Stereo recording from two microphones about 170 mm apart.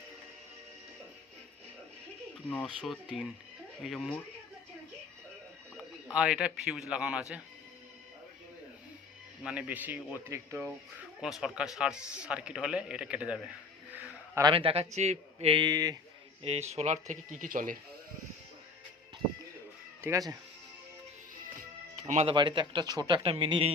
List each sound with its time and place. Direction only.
2.5 s a man's voice: 5° left (ahead or behind)
5.7 s speech: 5° right (ahead or behind)
9.4 s speech: 5° right (ahead or behind)
11.2 s a man's voice: centre (ahead or behind)
13.9 s a sound: 10° right (ahead or behind)
14.4 s speech: 30° right (ahead or behind)
16.4 s speech: 35° right (ahead or behind); by 17.7 s 55° right (ahead or behind)
20.0 s speech: 20° right (ahead or behind)
22.0 s speech: 45° right (ahead or behind)
22.3 s speech: 30° right (ahead or behind)